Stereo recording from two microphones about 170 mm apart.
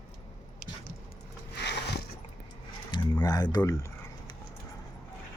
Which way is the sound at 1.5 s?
80° left.